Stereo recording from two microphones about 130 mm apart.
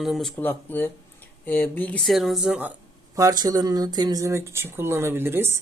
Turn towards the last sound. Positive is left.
turn(degrees=-20)  # may be behind; listen again after turning